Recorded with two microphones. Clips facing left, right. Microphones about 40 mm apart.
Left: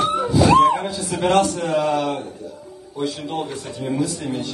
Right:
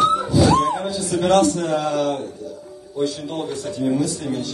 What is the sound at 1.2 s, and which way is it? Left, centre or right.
Speech, left.